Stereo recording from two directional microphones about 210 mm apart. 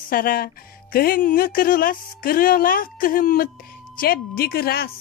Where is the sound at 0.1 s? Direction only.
45° left (ahead or behind).